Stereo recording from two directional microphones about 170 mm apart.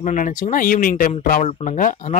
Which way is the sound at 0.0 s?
50° left (ahead or behind).